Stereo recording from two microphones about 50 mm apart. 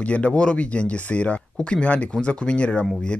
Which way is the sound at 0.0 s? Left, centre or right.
Left.